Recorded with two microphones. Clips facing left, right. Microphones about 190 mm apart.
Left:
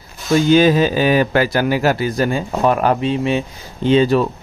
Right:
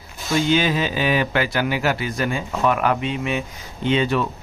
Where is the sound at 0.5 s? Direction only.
40° left (ahead or behind).